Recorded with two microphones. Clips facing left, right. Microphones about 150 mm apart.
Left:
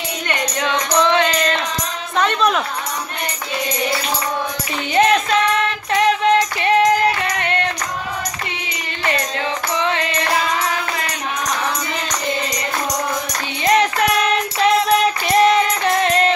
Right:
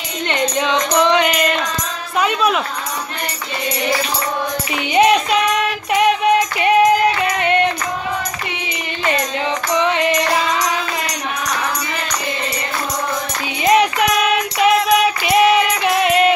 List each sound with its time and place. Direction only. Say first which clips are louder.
0.3 s music: right 4 dB; 20° right (ahead or behind)
2.1 s speech: even; 5° right (ahead or behind)
4.9 s music: right 2 dB; 10° right (ahead or behind)
7.3 s a sound: right 5 dB; 20° right (ahead or behind)
9.7 s music: right 4 dB; 20° right (ahead or behind)
13.7 s music: right 2 dB; 10° right (ahead or behind)